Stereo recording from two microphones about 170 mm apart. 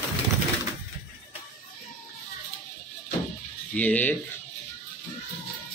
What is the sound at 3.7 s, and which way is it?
Speech, 10° left (ahead or behind).